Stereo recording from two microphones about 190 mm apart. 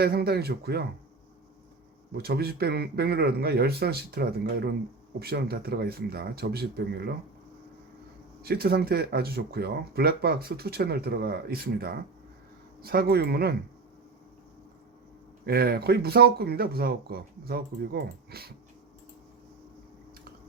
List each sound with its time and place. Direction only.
0.0 s speech: 55° right (ahead or behind)
2.1 s speech: 55° right (ahead or behind)
8.4 s speech: 55° right (ahead or behind)
15.4 s speech: 55° right (ahead or behind)